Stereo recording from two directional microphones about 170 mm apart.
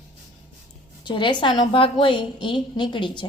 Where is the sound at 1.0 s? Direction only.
30° left (ahead or behind).